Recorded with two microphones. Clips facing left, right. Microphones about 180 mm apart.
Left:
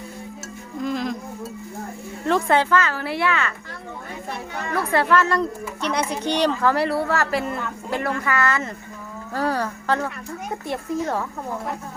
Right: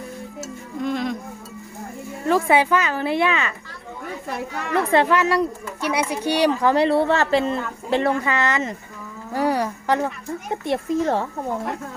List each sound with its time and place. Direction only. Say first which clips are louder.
0.8 s music: right 1 dB; centre (ahead or behind)
2.2 s a woman's voice: right 2 dB; 5° right (ahead or behind)
4.7 s a woman's voice: right 2 dB; 25° right (ahead or behind)